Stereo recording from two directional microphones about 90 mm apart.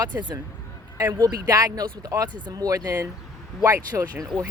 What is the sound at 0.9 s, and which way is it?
Speech, 40° right (ahead or behind).